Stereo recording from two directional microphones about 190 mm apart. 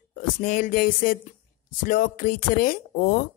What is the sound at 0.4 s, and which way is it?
Speech, 45° left (ahead or behind).